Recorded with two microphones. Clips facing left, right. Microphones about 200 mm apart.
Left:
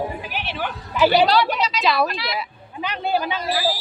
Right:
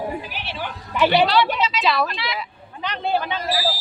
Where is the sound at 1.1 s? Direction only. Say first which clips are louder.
Left 1 dB; 40° left (ahead or behind).